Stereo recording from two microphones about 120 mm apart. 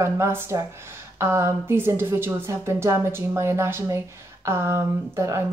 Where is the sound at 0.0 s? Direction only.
20° right (ahead or behind).